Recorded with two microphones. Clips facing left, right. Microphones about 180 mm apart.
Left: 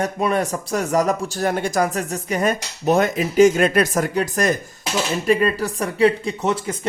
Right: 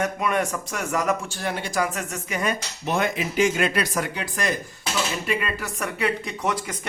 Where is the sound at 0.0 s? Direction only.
35° left (ahead or behind).